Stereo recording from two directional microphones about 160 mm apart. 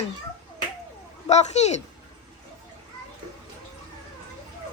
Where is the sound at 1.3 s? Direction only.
45° left (ahead or behind).